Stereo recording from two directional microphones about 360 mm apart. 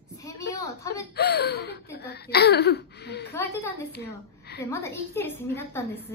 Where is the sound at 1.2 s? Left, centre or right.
Left.